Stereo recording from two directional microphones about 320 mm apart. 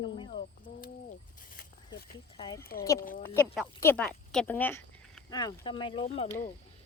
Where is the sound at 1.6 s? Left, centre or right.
Left.